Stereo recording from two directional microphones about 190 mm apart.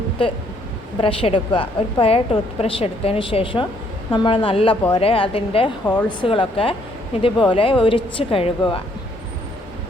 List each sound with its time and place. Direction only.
1.0 s a woman's voice: 25° left (ahead or behind)
5.8 s speech: 10° left (ahead or behind)
6.1 s a woman's voice: 25° left (ahead or behind)